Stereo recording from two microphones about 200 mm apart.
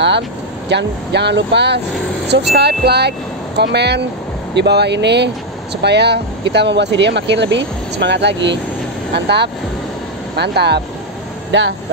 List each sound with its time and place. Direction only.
0.7 s speech: 60° right (ahead or behind)